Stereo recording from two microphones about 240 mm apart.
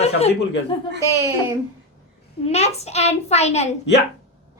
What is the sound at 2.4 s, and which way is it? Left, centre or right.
A child's voice, left.